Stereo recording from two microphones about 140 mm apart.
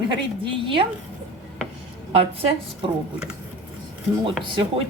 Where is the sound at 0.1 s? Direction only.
35° right (ahead or behind).